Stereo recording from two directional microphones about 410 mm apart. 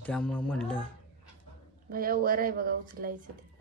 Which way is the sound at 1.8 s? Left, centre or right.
Right.